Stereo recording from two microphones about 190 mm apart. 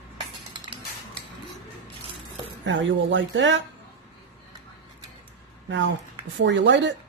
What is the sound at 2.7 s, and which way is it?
Speech, 70° right (ahead or behind).